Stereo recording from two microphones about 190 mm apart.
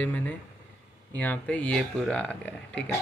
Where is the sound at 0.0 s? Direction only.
5° left (ahead or behind).